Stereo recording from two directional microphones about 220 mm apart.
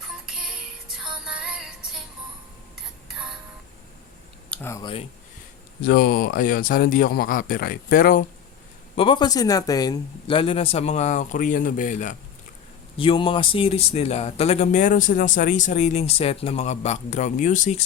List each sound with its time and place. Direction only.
0.1 s music: 5° right (ahead or behind)
2.7 s a sound: 5° right (ahead or behind)
4.5 s speech: 10° left (ahead or behind)
5.8 s speech: 45° left (ahead or behind)
9.0 s speech: 20° left (ahead or behind)
13.0 s speech: 25° left (ahead or behind)